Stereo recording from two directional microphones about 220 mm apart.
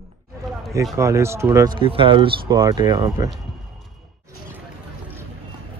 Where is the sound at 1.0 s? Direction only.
15° right (ahead or behind).